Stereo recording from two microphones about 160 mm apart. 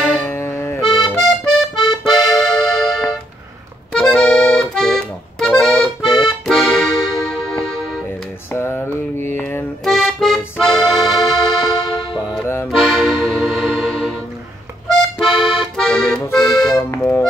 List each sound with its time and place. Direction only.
0.0 s accordion: 5° left (ahead or behind)
0.3 s accordion: 15° left (ahead or behind)
0.7 s accordion: centre (ahead or behind)
8.5 s mantra: 15° left (ahead or behind)
9.8 s accordion: centre (ahead or behind)
11.1 s music: centre (ahead or behind)
11.6 s music: 30° left (ahead or behind)
12.6 s accordion: centre (ahead or behind)
15.1 s accordion: centre (ahead or behind)